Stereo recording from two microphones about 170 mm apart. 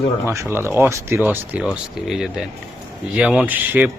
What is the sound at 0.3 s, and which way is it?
A man's voice, 15° right (ahead or behind).